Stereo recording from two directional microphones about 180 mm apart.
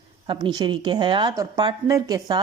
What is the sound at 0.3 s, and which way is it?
A woman's voice, 25° right (ahead or behind).